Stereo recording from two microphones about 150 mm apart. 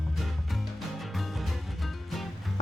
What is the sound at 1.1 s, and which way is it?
Music, centre (ahead or behind).